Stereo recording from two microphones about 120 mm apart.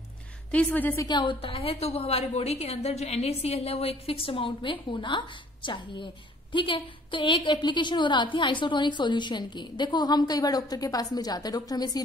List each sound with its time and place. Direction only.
0.5 s a woman's voice: 10° left (ahead or behind)
0.9 s a woman's voice: 35° left (ahead or behind)